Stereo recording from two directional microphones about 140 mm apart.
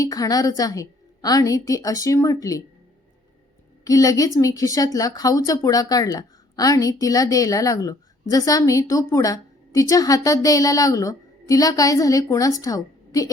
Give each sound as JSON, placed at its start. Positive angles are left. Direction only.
{"t": 0.0, "sound": "speech", "side_deg": 25}
{"t": 3.8, "sound": "speech", "side_deg": 25}